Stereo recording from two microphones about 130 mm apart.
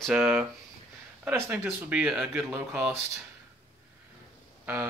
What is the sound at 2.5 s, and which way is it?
Speech, 20° right (ahead or behind).